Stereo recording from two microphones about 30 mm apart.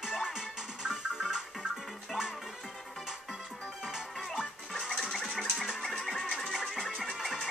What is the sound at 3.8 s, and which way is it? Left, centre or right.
Music, centre.